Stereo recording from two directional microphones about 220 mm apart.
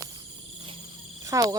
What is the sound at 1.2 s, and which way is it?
Cricket, 15° right (ahead or behind).